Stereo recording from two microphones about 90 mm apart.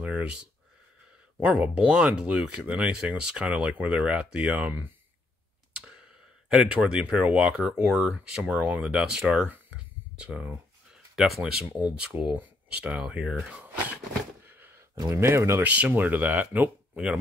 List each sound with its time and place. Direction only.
0.0 s speech: 15° right (ahead or behind)
1.6 s speech: 10° right (ahead or behind)
6.5 s speech: 10° right (ahead or behind)
11.8 s speech: 15° right (ahead or behind)
14.4 s a sound: 25° right (ahead or behind)
15.0 s speech: 30° right (ahead or behind)
15.6 s speech: 20° right (ahead or behind)